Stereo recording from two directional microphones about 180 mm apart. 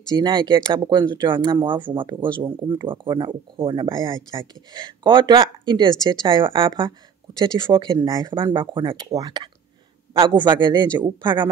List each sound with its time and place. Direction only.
0.1 s speech: 25° right (ahead or behind)